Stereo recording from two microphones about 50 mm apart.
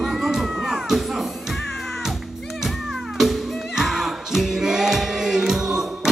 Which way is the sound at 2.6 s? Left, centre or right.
Centre.